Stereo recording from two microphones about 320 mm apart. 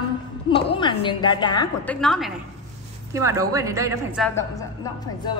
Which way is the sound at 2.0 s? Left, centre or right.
Centre.